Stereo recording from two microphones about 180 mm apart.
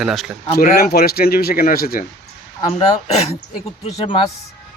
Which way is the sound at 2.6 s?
30° left (ahead or behind).